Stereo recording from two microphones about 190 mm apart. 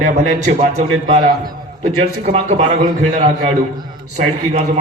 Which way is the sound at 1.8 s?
35° right (ahead or behind).